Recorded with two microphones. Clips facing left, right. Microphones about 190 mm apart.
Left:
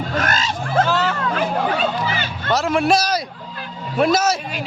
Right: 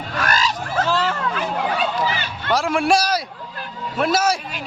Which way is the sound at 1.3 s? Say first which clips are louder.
Left 3 dB; 45° left (ahead or behind).